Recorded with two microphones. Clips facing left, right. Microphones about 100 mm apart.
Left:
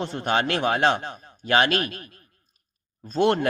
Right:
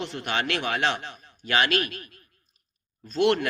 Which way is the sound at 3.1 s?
35° left (ahead or behind).